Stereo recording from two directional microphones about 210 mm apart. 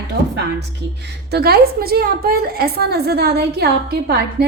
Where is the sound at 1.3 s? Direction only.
50° right (ahead or behind).